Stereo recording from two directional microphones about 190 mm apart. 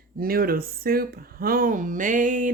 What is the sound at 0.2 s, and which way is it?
Speech, 50° right (ahead or behind).